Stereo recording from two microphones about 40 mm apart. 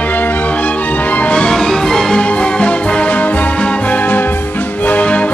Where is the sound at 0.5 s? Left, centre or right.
Left.